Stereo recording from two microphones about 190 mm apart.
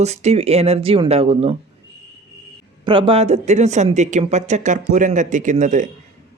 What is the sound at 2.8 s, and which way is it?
Speech, 25° right (ahead or behind).